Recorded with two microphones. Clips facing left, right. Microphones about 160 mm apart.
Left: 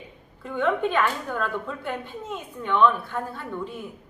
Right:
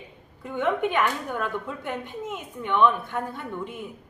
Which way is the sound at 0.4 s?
15° right (ahead or behind).